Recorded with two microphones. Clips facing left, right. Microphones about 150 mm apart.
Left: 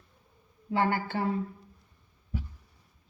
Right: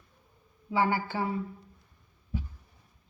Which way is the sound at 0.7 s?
55° left (ahead or behind).